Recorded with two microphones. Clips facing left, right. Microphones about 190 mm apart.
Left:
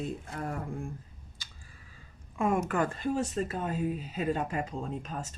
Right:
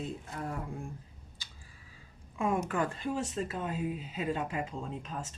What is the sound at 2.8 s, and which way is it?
Speech, 45° left (ahead or behind).